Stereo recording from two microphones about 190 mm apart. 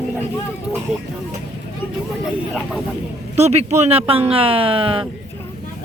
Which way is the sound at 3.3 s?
35° right (ahead or behind).